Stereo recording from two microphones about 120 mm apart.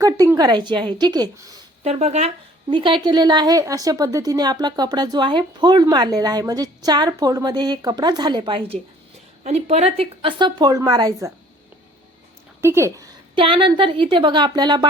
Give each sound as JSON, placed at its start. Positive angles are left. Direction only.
{"t": 0.3, "sound": "a woman's voice", "side_deg": -40}
{"t": 1.8, "sound": "speech", "side_deg": -60}
{"t": 2.6, "sound": "a woman's voice", "side_deg": -45}
{"t": 9.4, "sound": "a woman's voice", "side_deg": -60}
{"t": 12.6, "sound": "speech", "side_deg": -25}
{"t": 13.3, "sound": "speech", "side_deg": -50}